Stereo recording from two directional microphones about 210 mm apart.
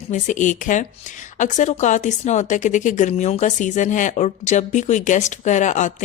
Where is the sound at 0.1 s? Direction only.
35° left (ahead or behind).